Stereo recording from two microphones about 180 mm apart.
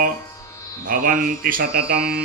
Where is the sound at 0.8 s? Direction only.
50° right (ahead or behind).